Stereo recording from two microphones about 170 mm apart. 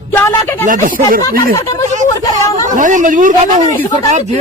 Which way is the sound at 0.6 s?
55° right (ahead or behind).